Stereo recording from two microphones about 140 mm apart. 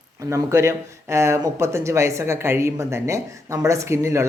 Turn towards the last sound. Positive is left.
turn(degrees=-20)  # may be behind; listen again after turning